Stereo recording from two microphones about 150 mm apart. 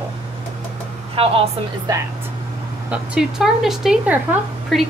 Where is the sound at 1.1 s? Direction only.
40° right (ahead or behind).